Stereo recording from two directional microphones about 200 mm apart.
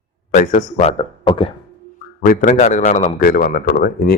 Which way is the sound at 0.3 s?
35° left (ahead or behind).